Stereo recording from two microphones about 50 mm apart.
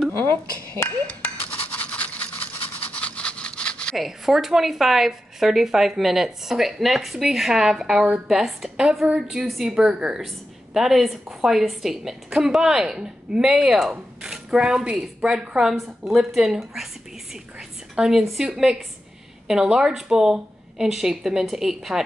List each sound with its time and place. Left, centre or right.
1.0 s toothbrush: left
3.9 s a woman's voice: centre
15.7 s a woman's voice: centre